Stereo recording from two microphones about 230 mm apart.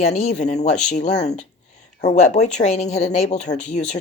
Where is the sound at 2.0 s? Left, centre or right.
Left.